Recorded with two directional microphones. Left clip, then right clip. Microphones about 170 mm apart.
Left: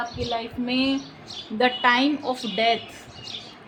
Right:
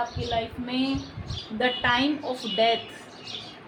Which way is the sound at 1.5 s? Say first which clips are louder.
Left 4 dB; 60° left (ahead or behind).